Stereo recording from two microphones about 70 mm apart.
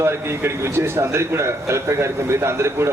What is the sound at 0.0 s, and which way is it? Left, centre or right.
A man's voice, right.